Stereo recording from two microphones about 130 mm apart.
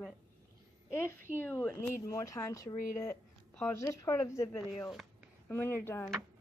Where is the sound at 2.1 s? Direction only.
25° left (ahead or behind).